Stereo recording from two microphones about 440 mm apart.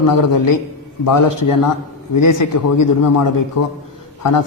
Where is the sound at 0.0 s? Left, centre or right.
Left.